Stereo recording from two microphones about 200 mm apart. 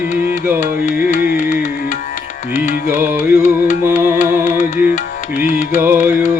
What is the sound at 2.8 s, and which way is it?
Music, 10° right (ahead or behind).